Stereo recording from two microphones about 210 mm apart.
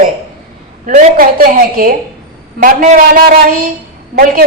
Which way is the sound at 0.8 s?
40° right (ahead or behind).